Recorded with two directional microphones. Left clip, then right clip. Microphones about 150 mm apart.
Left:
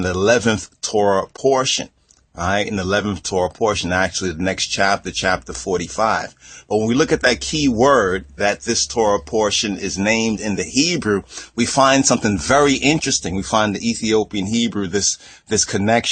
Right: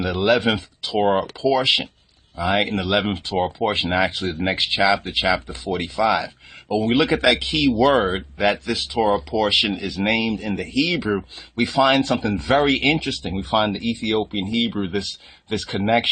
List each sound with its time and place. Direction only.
0.0 s speech: 45° left (ahead or behind)